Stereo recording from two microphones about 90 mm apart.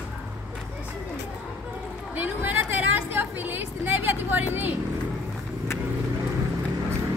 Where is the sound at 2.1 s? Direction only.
20° right (ahead or behind).